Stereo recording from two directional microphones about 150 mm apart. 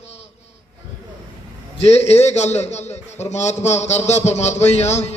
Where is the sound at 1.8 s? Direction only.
45° left (ahead or behind).